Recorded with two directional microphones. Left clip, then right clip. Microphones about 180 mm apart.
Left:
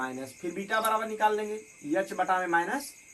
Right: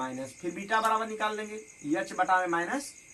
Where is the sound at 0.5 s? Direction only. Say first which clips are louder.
Right 2 dB; 5° right (ahead or behind).